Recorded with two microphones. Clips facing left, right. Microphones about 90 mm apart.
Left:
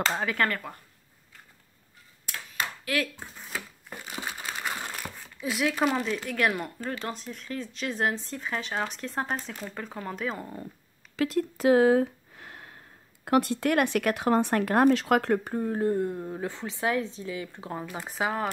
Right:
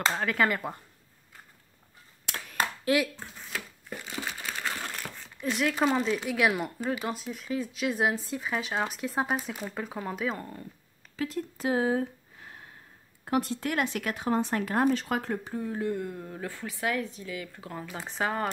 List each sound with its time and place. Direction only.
0.1 s speech: centre (ahead or behind)
0.5 s a woman's voice: 20° right (ahead or behind)
2.3 s a sound: 75° right (ahead or behind)
2.8 s speech: 20° right (ahead or behind)
4.1 s crumpling: 15° left (ahead or behind)
5.2 s speech: 5° left (ahead or behind)
11.1 s a sound: 90° left; by 12.7 s 70° left (ahead or behind)
13.2 s speech: 70° left (ahead or behind); by 17.8 s 25° left (ahead or behind)
17.9 s speech: 10° left (ahead or behind)